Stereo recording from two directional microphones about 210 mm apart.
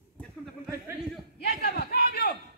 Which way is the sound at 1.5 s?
50° left (ahead or behind).